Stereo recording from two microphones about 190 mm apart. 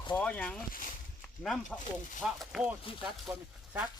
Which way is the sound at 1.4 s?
5° left (ahead or behind).